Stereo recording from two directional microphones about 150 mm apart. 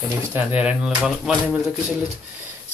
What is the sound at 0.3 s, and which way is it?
Speech, 10° right (ahead or behind).